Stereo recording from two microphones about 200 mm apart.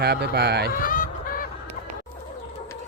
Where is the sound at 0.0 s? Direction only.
55° right (ahead or behind).